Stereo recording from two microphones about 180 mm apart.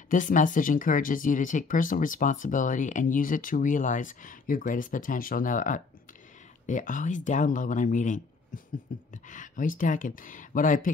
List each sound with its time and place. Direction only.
0.1 s speech: 45° left (ahead or behind)